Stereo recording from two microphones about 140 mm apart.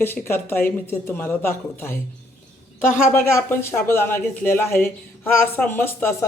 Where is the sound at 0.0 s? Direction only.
15° left (ahead or behind).